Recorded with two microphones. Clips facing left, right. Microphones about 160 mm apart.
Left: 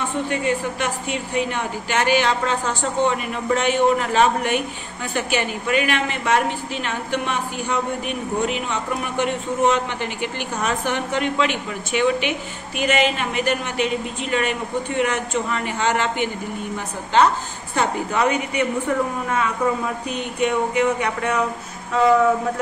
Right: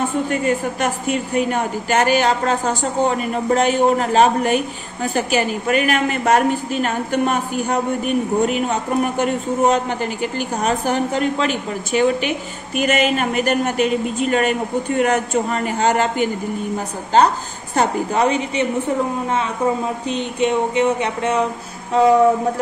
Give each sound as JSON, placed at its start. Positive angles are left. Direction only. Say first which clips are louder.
{"t": 0.3, "sound": "a man's voice", "louder": "right 3 dB", "side_deg": -45}